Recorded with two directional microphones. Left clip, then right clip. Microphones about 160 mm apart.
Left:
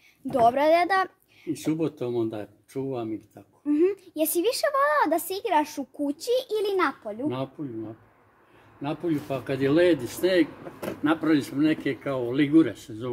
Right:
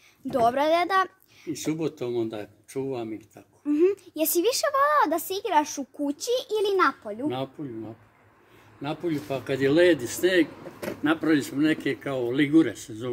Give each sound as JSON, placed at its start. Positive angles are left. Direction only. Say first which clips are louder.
{"t": 0.3, "sound": "a woman's voice", "louder": "left 2 dB", "side_deg": 0}
{"t": 1.5, "sound": "speech", "louder": "left 1 dB", "side_deg": 50}
{"t": 2.7, "sound": "speech", "louder": "even", "side_deg": 25}
{"t": 3.6, "sound": "speech", "louder": "right 1 dB", "side_deg": -10}
{"t": 8.8, "sound": "speech", "louder": "left 1 dB", "side_deg": 5}